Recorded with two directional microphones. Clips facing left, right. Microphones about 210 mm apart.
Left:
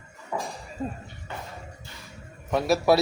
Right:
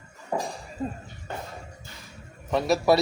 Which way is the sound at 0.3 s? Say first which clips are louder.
Right 3 dB; 30° right (ahead or behind).